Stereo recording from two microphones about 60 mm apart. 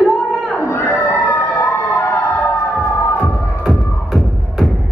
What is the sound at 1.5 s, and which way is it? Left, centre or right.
Emergency vehicle, left.